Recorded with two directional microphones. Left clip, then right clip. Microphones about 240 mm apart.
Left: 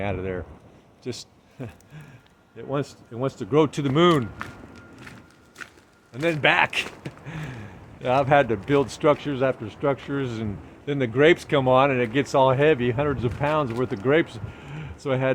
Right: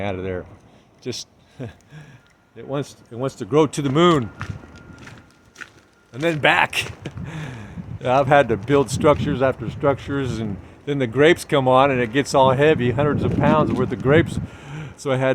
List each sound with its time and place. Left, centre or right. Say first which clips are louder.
0.0 s speech: right 2 dB; right
4.2 s speech: right 2 dB; centre
6.2 s speech: right 3 dB; right